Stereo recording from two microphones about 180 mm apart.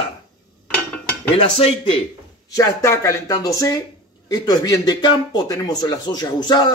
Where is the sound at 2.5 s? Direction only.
20° left (ahead or behind).